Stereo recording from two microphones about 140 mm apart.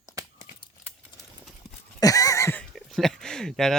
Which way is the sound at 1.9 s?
25° left (ahead or behind).